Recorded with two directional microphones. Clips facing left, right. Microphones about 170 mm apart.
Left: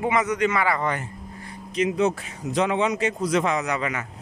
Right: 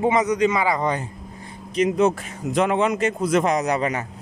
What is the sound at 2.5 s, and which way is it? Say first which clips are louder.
A man's voice: right 2 dB; 50° right (ahead or behind).